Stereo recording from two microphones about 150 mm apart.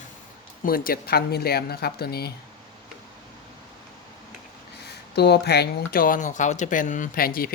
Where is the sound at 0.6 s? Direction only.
75° left (ahead or behind); by 2.3 s 90° left.